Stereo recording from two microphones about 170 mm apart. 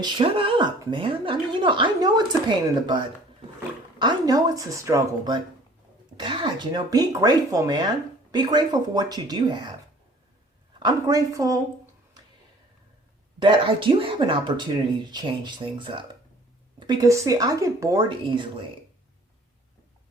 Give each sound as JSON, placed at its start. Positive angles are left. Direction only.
{"t": 0.0, "sound": "speech", "side_deg": -30}
{"t": 10.8, "sound": "speech", "side_deg": -25}
{"t": 13.4, "sound": "speech", "side_deg": -30}